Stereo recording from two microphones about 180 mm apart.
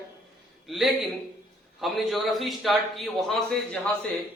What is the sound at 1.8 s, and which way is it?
A man's voice, centre (ahead or behind).